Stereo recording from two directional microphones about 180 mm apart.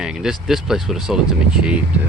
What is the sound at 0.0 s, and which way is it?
Speech, 5° right (ahead or behind).